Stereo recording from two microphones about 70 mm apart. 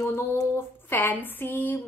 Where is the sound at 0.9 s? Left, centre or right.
Left.